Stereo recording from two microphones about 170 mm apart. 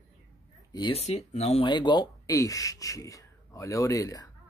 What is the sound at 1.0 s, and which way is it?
Speech, 40° left (ahead or behind).